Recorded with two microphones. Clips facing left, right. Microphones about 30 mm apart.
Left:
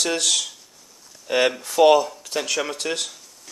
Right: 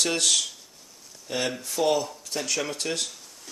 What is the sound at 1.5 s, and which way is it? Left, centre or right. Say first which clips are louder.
Speech: left 9 dB; left.